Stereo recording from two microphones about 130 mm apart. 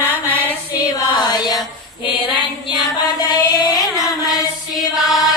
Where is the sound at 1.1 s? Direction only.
35° left (ahead or behind).